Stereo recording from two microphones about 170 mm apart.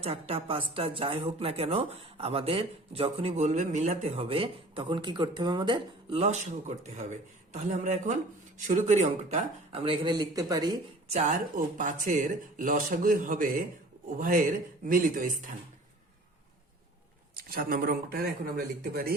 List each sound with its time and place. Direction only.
0.0 s a woman's voice: 35° right (ahead or behind)
9.8 s speech: 30° right (ahead or behind)
11.1 s speech: 45° right (ahead or behind)
17.3 s speech: 60° right (ahead or behind)